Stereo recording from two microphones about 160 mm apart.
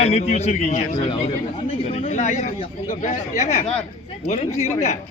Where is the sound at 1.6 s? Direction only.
40° left (ahead or behind).